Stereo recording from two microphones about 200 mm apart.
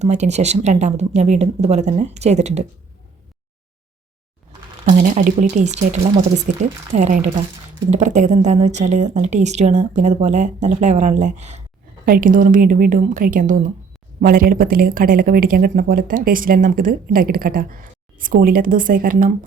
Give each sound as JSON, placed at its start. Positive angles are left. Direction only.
{"t": 0.0, "sound": "speech", "side_deg": -35}
{"t": 4.9, "sound": "speech", "side_deg": -40}